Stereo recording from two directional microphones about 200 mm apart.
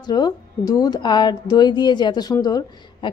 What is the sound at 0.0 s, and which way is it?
Speech, 20° left (ahead or behind).